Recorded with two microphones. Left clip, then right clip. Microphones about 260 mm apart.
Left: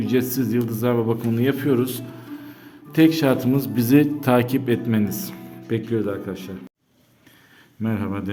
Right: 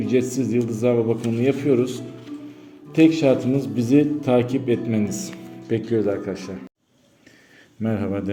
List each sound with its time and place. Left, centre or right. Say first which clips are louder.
0.0 s speech: right 1 dB; centre
7.8 s speech: right 2 dB; centre